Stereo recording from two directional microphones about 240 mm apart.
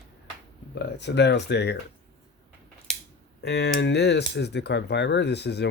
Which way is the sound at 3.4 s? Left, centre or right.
Left.